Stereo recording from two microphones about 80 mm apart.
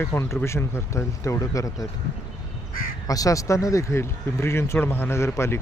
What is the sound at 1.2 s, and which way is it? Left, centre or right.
Speech, left.